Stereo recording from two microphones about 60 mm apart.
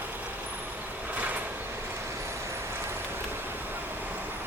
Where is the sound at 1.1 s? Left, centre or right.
Right.